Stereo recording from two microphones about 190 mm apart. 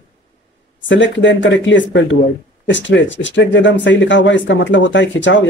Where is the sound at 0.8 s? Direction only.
75° left (ahead or behind).